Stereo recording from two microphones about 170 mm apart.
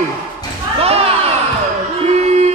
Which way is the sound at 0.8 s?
35° right (ahead or behind).